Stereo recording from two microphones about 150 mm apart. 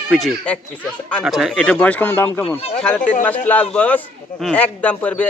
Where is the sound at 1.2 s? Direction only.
Centre (ahead or behind).